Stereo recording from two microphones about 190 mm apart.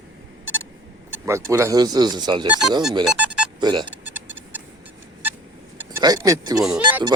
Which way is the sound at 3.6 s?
25° right (ahead or behind).